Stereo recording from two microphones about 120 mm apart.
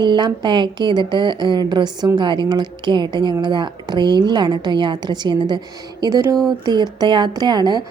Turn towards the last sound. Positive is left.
turn(degrees=-35)  # may be behind; listen again after turning